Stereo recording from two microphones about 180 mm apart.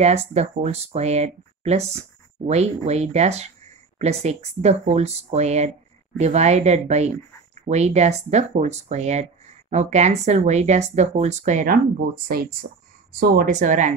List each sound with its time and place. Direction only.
0.0 s speech: 35° right (ahead or behind)